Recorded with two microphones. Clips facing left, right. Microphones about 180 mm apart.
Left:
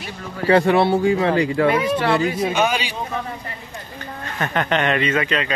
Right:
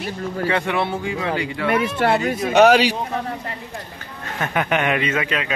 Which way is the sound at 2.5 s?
75° right (ahead or behind).